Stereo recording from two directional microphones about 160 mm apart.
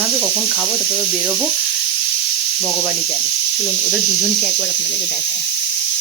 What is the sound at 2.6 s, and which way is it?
Speech, 20° right (ahead or behind).